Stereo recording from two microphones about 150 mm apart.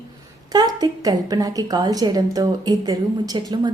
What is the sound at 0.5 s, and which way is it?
A woman's voice, 25° right (ahead or behind).